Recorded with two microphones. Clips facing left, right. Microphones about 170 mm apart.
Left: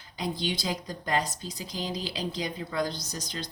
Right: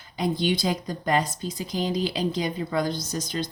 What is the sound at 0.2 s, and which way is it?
Speech, 55° right (ahead or behind).